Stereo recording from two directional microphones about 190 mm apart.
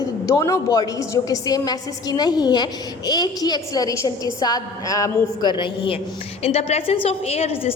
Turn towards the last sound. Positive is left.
turn(degrees=30)  # may be behind; listen again after turning